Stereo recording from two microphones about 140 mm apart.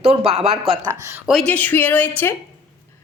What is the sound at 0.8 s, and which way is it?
Speech, 20° right (ahead or behind).